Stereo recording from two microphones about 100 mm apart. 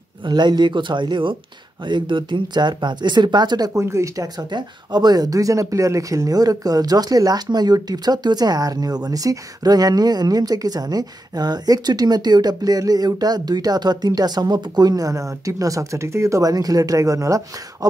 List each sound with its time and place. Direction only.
0.2 s speech: 45° right (ahead or behind)
3.7 s speech: 30° right (ahead or behind)
4.5 s speech: 45° right (ahead or behind)